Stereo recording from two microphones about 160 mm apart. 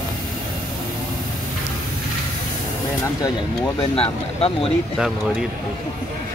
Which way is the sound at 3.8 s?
35° left (ahead or behind).